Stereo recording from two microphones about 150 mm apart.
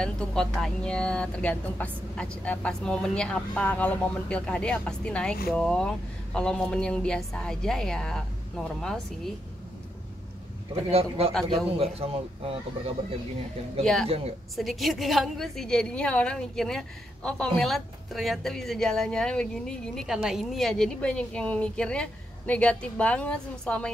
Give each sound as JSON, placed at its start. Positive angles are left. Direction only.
{"t": 0.0, "sound": "speech", "side_deg": 5}
{"t": 10.9, "sound": "speech", "side_deg": -40}
{"t": 14.0, "sound": "a woman's voice", "side_deg": -45}
{"t": 14.6, "sound": "speech", "side_deg": 0}